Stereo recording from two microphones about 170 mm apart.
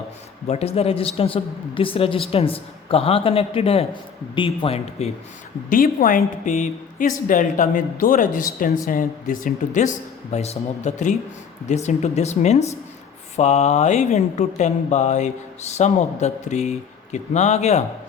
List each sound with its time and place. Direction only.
0.4 s a woman's voice: 40° left (ahead or behind)
5.6 s a woman's voice: 55° left (ahead or behind)